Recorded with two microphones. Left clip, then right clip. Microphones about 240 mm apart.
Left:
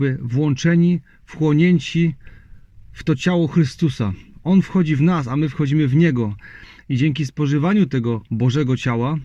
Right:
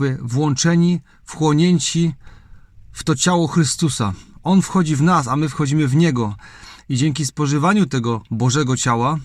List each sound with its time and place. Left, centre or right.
0.0 s speech: right